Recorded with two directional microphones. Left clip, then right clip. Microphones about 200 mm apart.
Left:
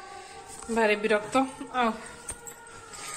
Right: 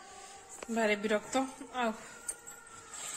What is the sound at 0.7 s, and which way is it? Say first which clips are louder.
A woman's voice: left 7 dB; 20° right (ahead or behind).